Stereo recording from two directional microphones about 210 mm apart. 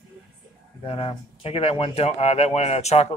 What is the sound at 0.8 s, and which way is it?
Speech, 25° left (ahead or behind).